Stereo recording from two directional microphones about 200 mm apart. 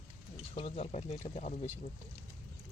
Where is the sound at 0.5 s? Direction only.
30° left (ahead or behind).